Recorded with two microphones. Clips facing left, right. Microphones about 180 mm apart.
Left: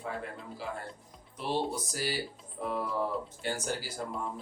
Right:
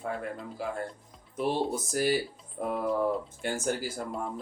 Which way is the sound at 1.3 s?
50° right (ahead or behind).